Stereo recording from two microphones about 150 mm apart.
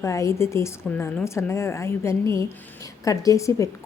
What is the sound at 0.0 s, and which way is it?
A woman's voice, 20° left (ahead or behind).